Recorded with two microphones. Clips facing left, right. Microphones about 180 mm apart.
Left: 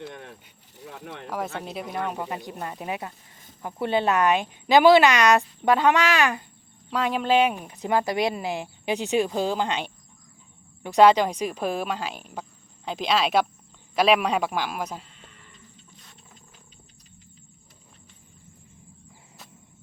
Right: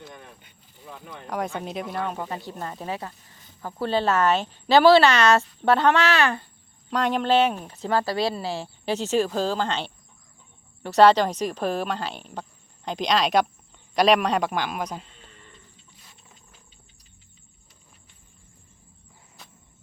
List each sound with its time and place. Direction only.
0.1 s a sound: 70° left (ahead or behind)
0.9 s speech: 80° left
1.3 s a man's voice: 5° left (ahead or behind)